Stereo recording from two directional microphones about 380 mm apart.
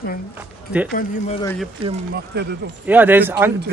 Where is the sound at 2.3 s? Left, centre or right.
Right.